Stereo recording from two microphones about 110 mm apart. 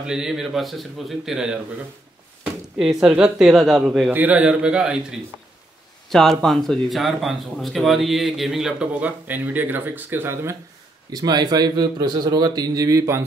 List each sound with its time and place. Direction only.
0.0 s speech: 5° right (ahead or behind)
4.1 s a man's voice: 15° right (ahead or behind)
6.0 s speech: 5° left (ahead or behind); by 10.6 s 25° right (ahead or behind)
11.1 s speech: 40° right (ahead or behind)